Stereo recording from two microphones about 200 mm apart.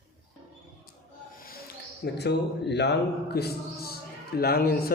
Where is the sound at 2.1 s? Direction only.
55° left (ahead or behind).